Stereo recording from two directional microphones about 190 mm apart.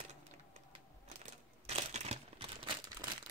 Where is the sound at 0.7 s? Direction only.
35° right (ahead or behind).